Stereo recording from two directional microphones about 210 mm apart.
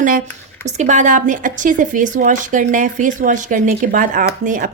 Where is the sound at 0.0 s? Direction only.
40° right (ahead or behind).